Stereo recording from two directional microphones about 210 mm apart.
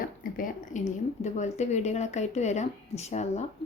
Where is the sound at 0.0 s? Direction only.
40° left (ahead or behind).